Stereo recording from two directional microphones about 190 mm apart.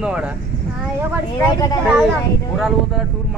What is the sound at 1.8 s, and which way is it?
Speech, 5° right (ahead or behind).